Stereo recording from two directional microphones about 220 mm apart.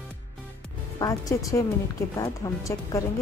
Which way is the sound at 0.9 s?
15° left (ahead or behind).